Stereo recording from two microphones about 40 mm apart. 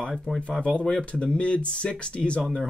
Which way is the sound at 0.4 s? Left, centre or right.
Left.